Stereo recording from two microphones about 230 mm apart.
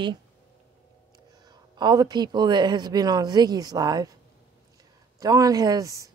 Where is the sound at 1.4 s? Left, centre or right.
Centre.